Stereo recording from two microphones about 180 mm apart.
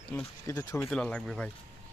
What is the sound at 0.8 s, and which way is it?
Speech, 5° left (ahead or behind).